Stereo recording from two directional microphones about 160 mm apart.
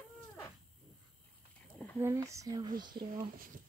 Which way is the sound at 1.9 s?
15° right (ahead or behind).